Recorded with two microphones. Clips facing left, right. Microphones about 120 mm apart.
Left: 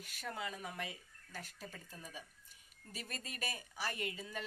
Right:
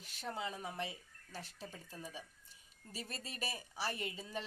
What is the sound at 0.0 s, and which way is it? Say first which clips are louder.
Speech: right 1 dB; 30° right (ahead or behind).